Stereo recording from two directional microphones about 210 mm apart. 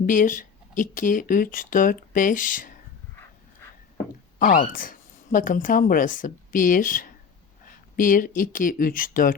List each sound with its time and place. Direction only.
0.0 s speech: 40° left (ahead or behind)
4.4 s a woman's voice: 40° left (ahead or behind)